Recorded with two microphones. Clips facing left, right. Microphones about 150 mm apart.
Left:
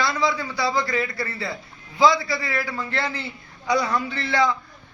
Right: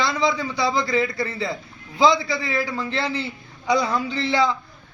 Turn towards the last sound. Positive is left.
turn(degrees=-20)  # may be behind; listen again after turning